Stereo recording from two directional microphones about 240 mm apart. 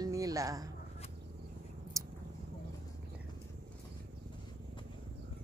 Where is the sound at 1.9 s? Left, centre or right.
Centre.